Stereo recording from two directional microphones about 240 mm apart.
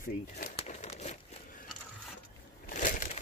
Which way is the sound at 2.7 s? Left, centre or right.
Left.